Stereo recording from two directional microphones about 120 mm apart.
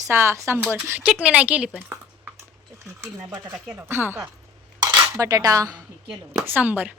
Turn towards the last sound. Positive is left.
turn(degrees=-15)  # may be behind; listen again after turning